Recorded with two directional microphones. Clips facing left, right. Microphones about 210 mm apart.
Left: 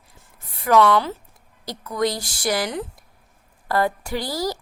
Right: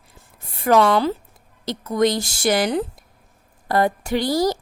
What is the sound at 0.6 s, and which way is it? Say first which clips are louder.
A woman's voice: right 1 dB; 30° right (ahead or behind).